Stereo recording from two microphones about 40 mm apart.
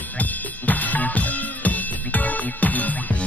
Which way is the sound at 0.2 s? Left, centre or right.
Left.